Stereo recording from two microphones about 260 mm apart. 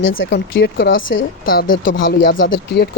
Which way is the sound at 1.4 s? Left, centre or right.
Left.